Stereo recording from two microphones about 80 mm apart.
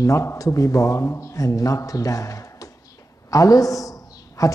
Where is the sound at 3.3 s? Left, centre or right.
Left.